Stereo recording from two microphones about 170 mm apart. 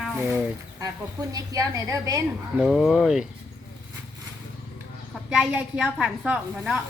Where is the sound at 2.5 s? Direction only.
Centre (ahead or behind).